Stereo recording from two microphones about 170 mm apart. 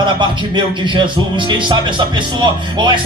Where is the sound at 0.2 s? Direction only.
25° right (ahead or behind).